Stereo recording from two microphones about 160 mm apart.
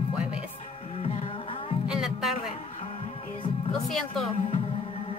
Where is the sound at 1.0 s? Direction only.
35° left (ahead or behind).